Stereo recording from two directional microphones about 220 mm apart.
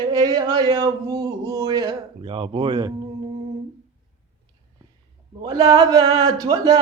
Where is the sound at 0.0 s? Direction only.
15° right (ahead or behind).